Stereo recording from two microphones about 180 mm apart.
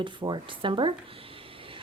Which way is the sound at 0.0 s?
25° right (ahead or behind).